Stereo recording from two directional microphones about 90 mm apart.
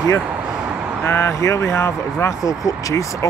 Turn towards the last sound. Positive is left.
turn(degrees=40)  # may be behind; listen again after turning